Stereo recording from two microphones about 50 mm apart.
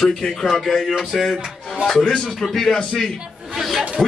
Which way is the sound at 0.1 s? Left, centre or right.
Centre.